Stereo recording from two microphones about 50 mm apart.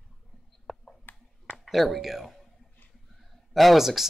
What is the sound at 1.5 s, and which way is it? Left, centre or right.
Speech, centre.